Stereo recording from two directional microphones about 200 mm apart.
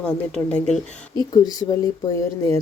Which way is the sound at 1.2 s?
20° left (ahead or behind).